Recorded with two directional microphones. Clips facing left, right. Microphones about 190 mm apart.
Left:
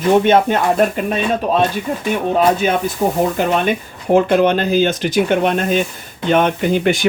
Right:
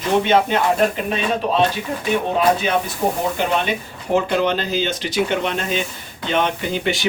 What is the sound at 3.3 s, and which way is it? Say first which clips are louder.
Speech: left 4 dB; 50° left (ahead or behind).